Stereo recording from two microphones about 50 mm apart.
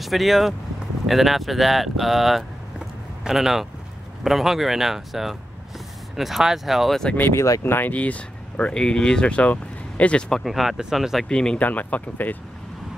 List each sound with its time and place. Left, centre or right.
0.0 s speech: centre
7.3 s speech: left
7.6 s speech: left
7.9 s speech: left
10.4 s speech: centre
11.2 s speech: centre
11.6 s speech: left